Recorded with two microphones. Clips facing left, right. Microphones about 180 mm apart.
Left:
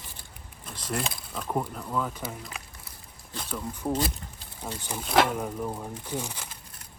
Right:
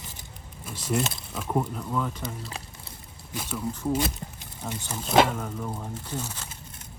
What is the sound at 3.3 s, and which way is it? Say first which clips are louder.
Speech: right 2 dB; 5° right (ahead or behind).